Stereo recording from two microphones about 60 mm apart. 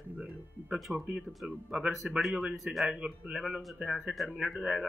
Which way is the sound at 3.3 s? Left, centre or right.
Centre.